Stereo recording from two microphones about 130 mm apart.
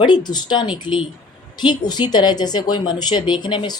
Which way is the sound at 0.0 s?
35° left (ahead or behind).